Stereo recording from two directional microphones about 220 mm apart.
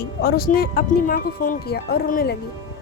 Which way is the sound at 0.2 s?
45° left (ahead or behind).